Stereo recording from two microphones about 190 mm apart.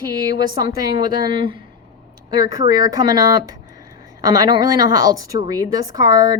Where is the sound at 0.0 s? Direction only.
20° right (ahead or behind).